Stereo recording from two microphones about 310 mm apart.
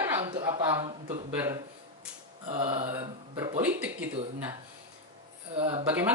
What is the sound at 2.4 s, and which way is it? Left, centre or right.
A man's voice, centre.